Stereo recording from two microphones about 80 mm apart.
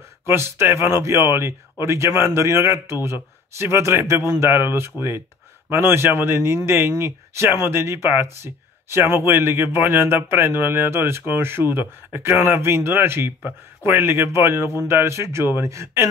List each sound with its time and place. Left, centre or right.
0.3 s speech: right
4.9 s speech: left
5.7 s a man's voice: right